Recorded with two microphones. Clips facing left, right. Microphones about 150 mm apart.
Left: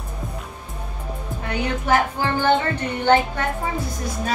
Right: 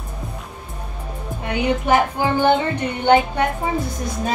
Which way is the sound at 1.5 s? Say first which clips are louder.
Right 3 dB; 15° right (ahead or behind).